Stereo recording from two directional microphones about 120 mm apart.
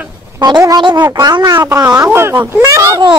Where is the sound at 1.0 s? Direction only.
25° right (ahead or behind).